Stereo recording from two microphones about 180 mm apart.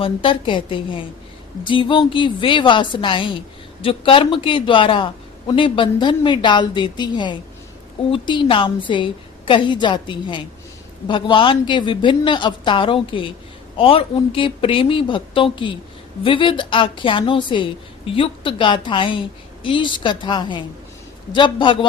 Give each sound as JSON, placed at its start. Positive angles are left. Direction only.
{"t": 0.0, "sound": "speech", "side_deg": 30}